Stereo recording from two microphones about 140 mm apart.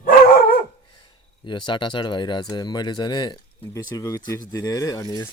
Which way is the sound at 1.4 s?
35° left (ahead or behind).